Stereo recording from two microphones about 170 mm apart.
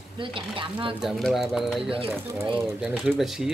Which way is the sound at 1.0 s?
Centre (ahead or behind).